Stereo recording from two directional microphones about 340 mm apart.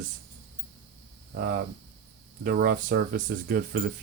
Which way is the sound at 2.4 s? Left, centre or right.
Right.